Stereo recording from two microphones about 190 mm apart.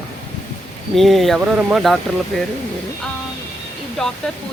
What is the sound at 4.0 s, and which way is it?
Speech, centre (ahead or behind).